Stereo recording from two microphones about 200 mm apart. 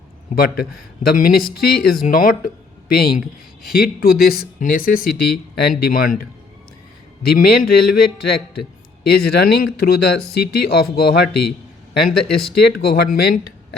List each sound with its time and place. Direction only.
0.3 s speech: 50° left (ahead or behind)
7.3 s speech: 50° left (ahead or behind)
12.5 s speech: 50° left (ahead or behind)